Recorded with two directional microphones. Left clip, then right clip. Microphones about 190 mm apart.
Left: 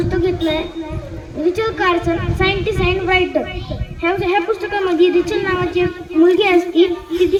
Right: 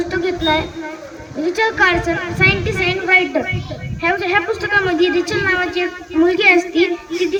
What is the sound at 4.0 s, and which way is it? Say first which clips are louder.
A woman's voice: even; 45° right (ahead or behind).